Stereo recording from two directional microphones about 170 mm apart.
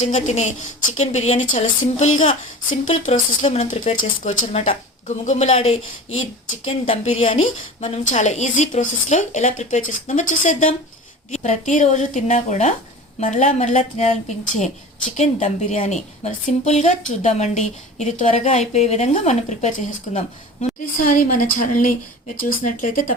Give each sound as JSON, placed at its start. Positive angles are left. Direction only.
{"t": 0.0, "sound": "a woman's voice", "side_deg": 45}